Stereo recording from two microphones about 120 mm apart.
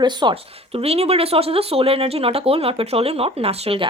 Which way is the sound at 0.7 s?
55° right (ahead or behind).